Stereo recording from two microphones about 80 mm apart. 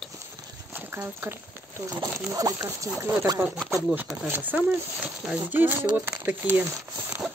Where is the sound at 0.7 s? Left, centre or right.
Right.